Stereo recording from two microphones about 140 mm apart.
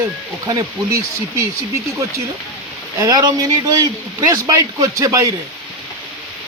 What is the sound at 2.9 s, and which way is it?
Speech, 25° right (ahead or behind).